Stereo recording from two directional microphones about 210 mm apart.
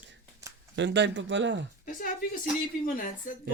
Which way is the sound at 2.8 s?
40° left (ahead or behind).